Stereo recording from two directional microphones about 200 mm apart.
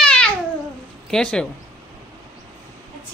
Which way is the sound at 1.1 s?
5° left (ahead or behind).